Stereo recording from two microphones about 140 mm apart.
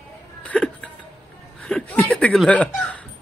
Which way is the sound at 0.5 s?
5° left (ahead or behind).